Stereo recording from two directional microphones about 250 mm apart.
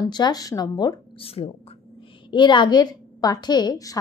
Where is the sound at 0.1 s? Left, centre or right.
Centre.